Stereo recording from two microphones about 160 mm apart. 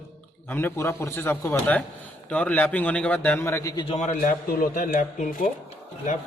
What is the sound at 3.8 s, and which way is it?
Speech, 45° left (ahead or behind).